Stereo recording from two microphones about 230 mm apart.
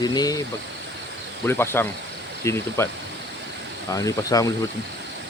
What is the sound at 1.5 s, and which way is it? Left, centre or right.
Speech, centre.